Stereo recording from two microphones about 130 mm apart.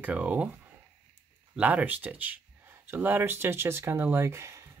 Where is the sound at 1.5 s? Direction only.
10° right (ahead or behind).